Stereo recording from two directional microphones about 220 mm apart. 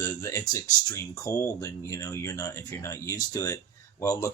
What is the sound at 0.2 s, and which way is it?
Speech, 15° left (ahead or behind).